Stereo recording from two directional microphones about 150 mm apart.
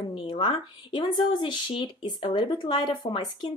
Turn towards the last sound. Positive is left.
turn(degrees=30)  # may be behind; listen again after turning